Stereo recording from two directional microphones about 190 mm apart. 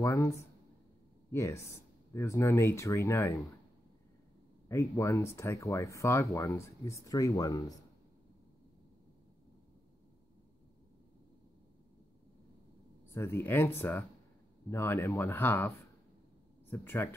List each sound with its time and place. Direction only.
0.0 s speech: 15° left (ahead or behind)
1.3 s speech: 15° left (ahead or behind)
4.6 s speech: 15° left (ahead or behind)
13.1 s speech: 10° left (ahead or behind)
16.7 s speech: 10° left (ahead or behind)